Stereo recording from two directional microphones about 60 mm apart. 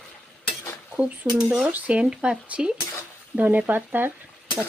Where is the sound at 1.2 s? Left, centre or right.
Right.